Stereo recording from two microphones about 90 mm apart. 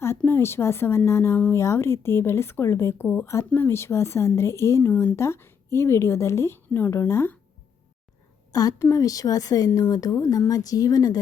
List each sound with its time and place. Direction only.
0.3 s a woman's voice: 30° left (ahead or behind)
8.5 s a woman's voice: 40° left (ahead or behind)